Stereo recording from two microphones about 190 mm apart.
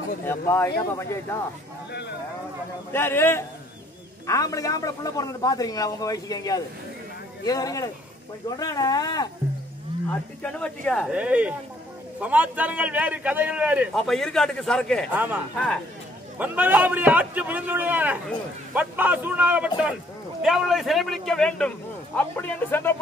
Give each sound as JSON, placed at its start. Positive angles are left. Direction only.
{"t": 0.2, "sound": "speech", "side_deg": 15}
{"t": 2.9, "sound": "a man's voice", "side_deg": 10}
{"t": 10.4, "sound": "a man's voice", "side_deg": 5}
{"t": 11.1, "sound": "a man's voice", "side_deg": -5}
{"t": 16.3, "sound": "a man's voice", "side_deg": -10}